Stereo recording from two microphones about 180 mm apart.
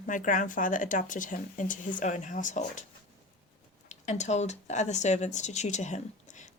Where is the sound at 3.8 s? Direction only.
40° left (ahead or behind).